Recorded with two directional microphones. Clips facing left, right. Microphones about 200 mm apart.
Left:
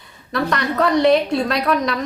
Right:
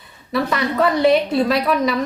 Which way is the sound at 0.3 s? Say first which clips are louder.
Right 1 dB; 5° right (ahead or behind).